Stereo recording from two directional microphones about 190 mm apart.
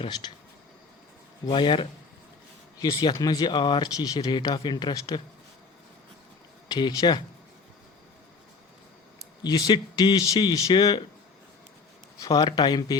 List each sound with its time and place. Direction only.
0.2 s speech: 25° left (ahead or behind)
1.5 s speech: 25° left (ahead or behind)
6.7 s speech: 25° left (ahead or behind)
9.4 s speech: 20° left (ahead or behind)
12.2 s speech: 20° left (ahead or behind)